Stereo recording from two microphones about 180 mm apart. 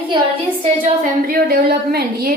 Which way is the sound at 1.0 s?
50° right (ahead or behind).